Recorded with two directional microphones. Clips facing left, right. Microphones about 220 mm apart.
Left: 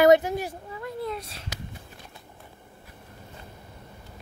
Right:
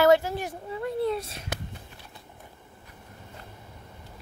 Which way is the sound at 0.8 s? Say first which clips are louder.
Right 5 dB; 30° right (ahead or behind).